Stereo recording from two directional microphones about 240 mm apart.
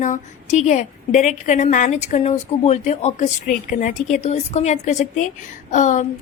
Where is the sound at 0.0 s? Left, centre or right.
Left.